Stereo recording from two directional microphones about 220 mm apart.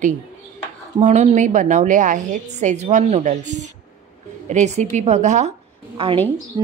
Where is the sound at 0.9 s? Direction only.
30° right (ahead or behind).